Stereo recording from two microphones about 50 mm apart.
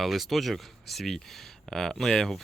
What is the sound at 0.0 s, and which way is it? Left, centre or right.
Speech, centre.